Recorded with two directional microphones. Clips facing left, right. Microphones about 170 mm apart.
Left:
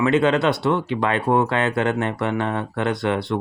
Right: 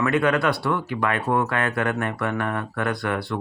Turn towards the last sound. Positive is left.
turn(degrees=20)  # may be behind; listen again after turning